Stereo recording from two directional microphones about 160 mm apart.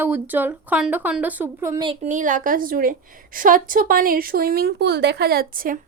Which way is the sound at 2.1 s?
50° right (ahead or behind).